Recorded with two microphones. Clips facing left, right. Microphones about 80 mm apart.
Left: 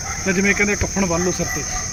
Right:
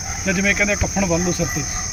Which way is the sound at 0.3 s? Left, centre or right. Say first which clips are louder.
Left 1 dB; centre.